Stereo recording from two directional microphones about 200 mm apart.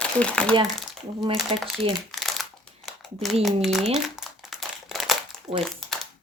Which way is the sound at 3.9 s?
Centre (ahead or behind).